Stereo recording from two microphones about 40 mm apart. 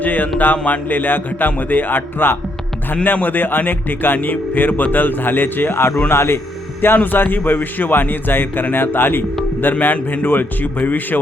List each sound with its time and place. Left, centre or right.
0.0 s mantra: left
0.3 s speech: left
2.9 s speech: left
6.1 s speech: left
6.8 s a man's voice: left
9.9 s speech: left